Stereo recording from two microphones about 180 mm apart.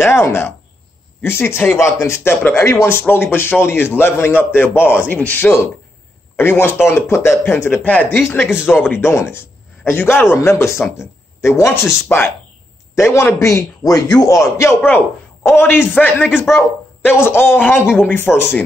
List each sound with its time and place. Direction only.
0.0 s a man's voice: 15° left (ahead or behind)